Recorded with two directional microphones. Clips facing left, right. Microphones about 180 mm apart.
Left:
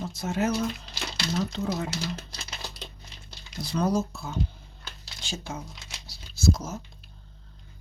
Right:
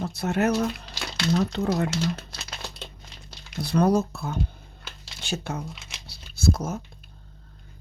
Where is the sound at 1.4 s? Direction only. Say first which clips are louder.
Right 3 dB; 65° right (ahead or behind).